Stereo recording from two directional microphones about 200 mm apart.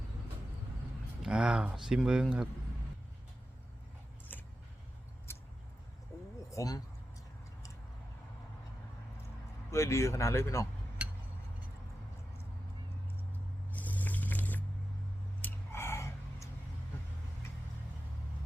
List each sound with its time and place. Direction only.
1.2 s speech: 5° right (ahead or behind)
4.3 s vehicle: 10° left (ahead or behind)
5.3 s a sound: 10° left (ahead or behind)
6.5 s speech: 15° left (ahead or behind)
9.7 s speech: 15° left (ahead or behind)
13.7 s a sound: 10° left (ahead or behind)